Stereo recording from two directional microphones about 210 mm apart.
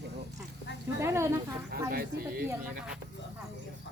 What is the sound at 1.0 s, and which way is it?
Snake, 15° right (ahead or behind).